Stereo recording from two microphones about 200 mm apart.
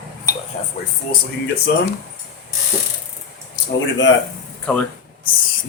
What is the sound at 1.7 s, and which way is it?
Speech, 55° left (ahead or behind).